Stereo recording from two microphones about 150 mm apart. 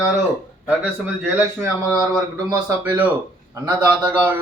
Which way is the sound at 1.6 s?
25° right (ahead or behind).